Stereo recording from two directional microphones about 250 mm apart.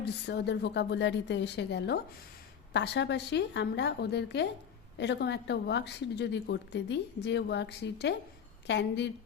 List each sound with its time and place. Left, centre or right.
0.0 s a woman's voice: left